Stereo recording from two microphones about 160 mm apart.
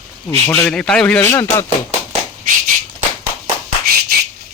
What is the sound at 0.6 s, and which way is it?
Speech, 5° left (ahead or behind).